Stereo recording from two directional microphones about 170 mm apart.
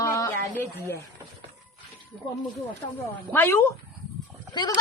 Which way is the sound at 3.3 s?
10° left (ahead or behind).